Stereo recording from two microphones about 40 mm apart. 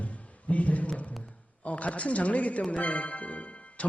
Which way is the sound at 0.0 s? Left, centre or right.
Left.